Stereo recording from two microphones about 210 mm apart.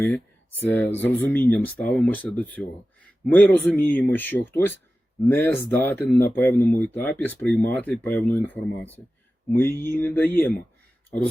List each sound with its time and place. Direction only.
0.7 s speech: 10° left (ahead or behind)